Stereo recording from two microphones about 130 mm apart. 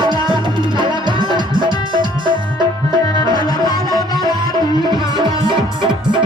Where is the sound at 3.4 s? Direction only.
30° left (ahead or behind).